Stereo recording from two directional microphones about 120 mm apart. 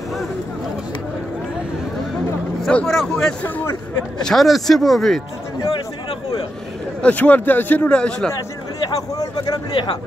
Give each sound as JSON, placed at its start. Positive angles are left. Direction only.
{"t": 2.6, "sound": "speech", "side_deg": 5}
{"t": 3.4, "sound": "hubbub", "side_deg": 15}
{"t": 4.2, "sound": "speech", "side_deg": 5}
{"t": 7.0, "sound": "a man's voice", "side_deg": 10}
{"t": 8.4, "sound": "a man's voice", "side_deg": 30}